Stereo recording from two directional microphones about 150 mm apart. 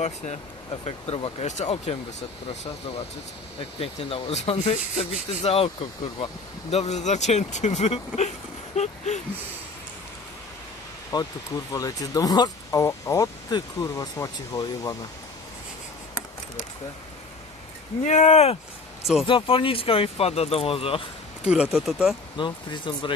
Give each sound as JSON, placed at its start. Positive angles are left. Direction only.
{"t": 0.0, "sound": "speech", "side_deg": 50}
{"t": 3.8, "sound": "speech", "side_deg": 40}
{"t": 8.7, "sound": "a sound", "side_deg": 50}
{"t": 11.1, "sound": "speech", "side_deg": 25}
{"t": 18.0, "sound": "speech", "side_deg": 50}
{"t": 21.5, "sound": "speech", "side_deg": -5}
{"t": 22.4, "sound": "speech", "side_deg": 30}